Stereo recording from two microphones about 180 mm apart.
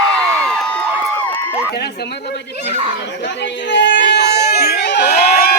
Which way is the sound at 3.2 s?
75° left (ahead or behind).